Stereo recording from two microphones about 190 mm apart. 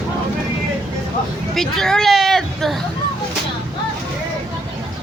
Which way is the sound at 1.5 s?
Centre (ahead or behind).